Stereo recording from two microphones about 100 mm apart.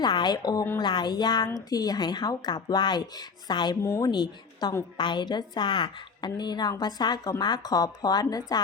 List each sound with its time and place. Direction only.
0.0 s a woman's voice: 50° left (ahead or behind)
3.8 s speech: 30° left (ahead or behind)
4.1 s a woman's voice: 45° left (ahead or behind)